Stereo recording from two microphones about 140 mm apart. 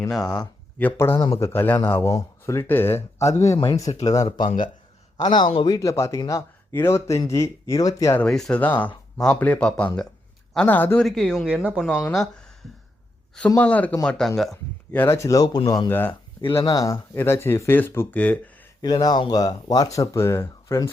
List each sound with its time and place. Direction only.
0.1 s speech: 5° left (ahead or behind)
0.8 s speech: 15° left (ahead or behind)
4.4 s speech: 70° left (ahead or behind)
5.1 s a man's voice: 30° left (ahead or behind)
8.2 s speech: 5° left (ahead or behind)
11.0 s speech: centre (ahead or behind)
11.9 s speech: 5° left (ahead or behind)
13.6 s speech: 10° left (ahead or behind)
14.9 s speech: 15° left (ahead or behind)
15.9 s speech: 15° left (ahead or behind)
16.4 s a man's voice: 40° left (ahead or behind)
16.7 s speech: 25° left (ahead or behind)
18.8 s speech: 30° left (ahead or behind)